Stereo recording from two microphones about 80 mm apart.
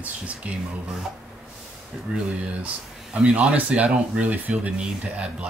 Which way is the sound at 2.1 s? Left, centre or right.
Centre.